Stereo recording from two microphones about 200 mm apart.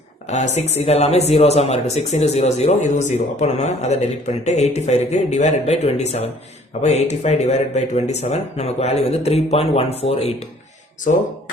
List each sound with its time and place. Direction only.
0.3 s speech: 35° left (ahead or behind)